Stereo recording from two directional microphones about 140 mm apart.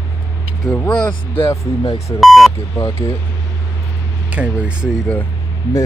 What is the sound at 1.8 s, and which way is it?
Speech, 25° left (ahead or behind).